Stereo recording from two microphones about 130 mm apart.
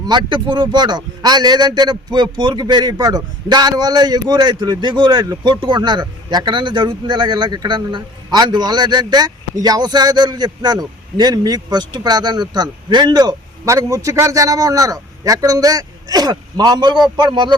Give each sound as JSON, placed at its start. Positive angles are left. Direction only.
{"t": 0.0, "sound": "a man's voice", "side_deg": -35}